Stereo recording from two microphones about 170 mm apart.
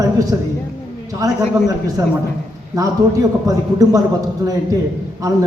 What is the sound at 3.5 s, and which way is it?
Speech, 20° right (ahead or behind).